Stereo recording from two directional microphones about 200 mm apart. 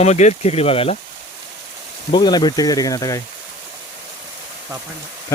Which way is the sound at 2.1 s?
20° left (ahead or behind).